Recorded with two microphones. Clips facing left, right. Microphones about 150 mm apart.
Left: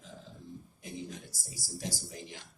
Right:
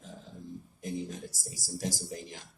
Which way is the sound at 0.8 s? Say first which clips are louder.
Right 6 dB; 45° right (ahead or behind).